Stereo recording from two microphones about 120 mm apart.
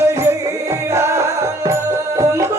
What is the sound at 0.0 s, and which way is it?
Music, 20° right (ahead or behind).